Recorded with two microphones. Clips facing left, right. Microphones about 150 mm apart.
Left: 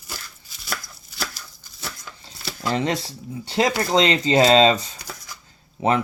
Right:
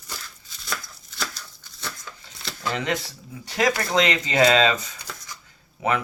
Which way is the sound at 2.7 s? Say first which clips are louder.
Left 4 dB; 35° left (ahead or behind).